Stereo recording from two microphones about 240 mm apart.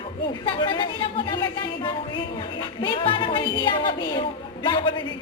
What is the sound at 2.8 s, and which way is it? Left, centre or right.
A woman's voice, left.